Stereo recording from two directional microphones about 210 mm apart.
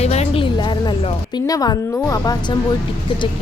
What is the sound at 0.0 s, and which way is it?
Music, 30° left (ahead or behind).